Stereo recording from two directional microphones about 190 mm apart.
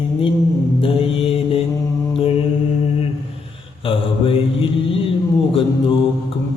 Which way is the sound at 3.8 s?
30° left (ahead or behind).